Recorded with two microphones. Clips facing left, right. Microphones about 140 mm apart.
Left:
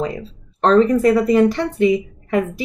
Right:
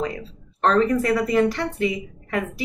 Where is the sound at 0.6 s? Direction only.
20° left (ahead or behind).